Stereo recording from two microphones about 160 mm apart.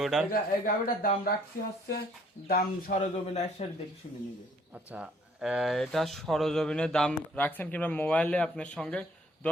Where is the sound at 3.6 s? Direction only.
45° left (ahead or behind).